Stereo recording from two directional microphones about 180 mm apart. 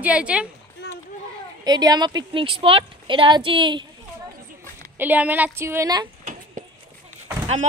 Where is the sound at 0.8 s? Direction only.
65° left (ahead or behind).